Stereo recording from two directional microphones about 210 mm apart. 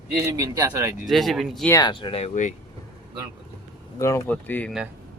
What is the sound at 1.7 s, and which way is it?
Speech, 20° left (ahead or behind).